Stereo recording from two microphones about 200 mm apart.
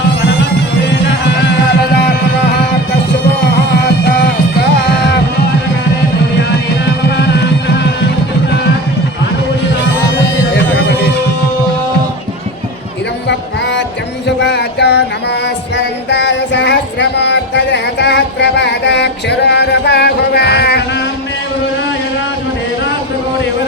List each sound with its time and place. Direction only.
6.8 s music: 60° left (ahead or behind)
10.7 s music: 60° left (ahead or behind)
13.2 s music: 60° left (ahead or behind)
14.3 s a sound: 60° left (ahead or behind)